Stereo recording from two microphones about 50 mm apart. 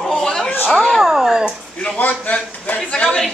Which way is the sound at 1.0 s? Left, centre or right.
Centre.